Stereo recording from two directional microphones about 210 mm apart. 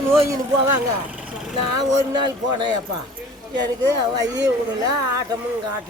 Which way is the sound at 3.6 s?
20° right (ahead or behind).